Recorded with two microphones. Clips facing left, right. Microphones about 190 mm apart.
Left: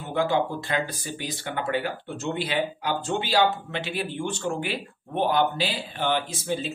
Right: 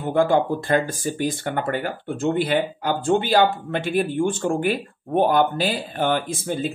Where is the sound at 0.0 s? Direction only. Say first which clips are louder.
Right 6 dB; 50° right (ahead or behind).